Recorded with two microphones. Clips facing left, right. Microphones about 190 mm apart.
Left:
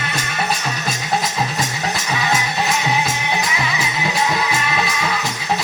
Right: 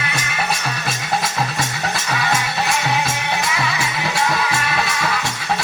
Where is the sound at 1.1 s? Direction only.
20° left (ahead or behind).